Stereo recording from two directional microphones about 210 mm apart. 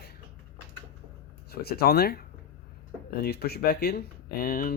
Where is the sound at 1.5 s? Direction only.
50° left (ahead or behind).